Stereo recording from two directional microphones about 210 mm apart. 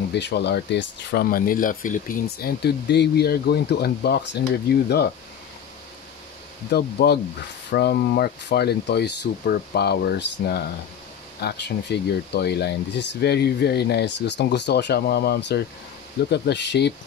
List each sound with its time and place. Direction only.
0.1 s speech: 55° left (ahead or behind)
6.7 s speech: 50° left (ahead or behind)